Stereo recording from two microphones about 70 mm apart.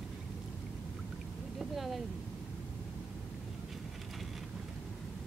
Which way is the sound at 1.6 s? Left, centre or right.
Centre.